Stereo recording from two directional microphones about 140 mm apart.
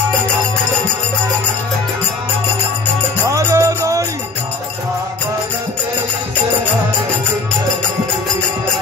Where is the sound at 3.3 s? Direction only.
20° right (ahead or behind).